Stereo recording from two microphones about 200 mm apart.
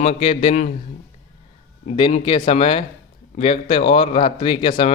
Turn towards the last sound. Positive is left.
turn(degrees=25)  # may be behind; listen again after turning